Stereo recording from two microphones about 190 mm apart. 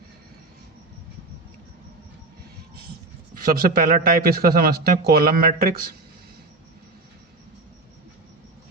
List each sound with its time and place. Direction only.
3.3 s speech: 45° right (ahead or behind)